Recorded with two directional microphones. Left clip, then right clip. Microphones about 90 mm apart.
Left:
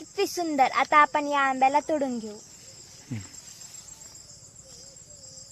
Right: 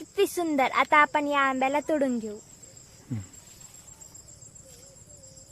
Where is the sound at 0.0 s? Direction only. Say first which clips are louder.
Right 2 dB; 35° right (ahead or behind).